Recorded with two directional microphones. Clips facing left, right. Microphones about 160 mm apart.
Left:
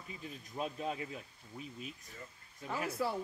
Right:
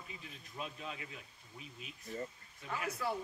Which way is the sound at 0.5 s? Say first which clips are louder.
Left 6 dB; 40° left (ahead or behind).